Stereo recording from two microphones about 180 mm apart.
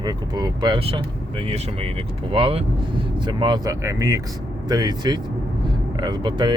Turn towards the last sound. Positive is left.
turn(degrees=-25)  # may be behind; listen again after turning